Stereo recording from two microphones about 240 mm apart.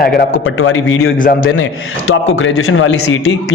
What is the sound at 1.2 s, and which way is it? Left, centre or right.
Speech, left.